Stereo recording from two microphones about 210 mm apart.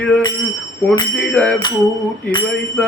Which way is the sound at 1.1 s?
5° left (ahead or behind).